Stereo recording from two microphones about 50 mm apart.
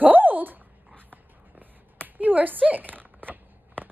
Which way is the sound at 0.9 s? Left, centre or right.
Right.